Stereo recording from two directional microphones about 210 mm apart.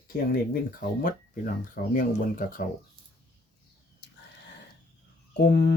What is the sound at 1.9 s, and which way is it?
Speech, 40° left (ahead or behind).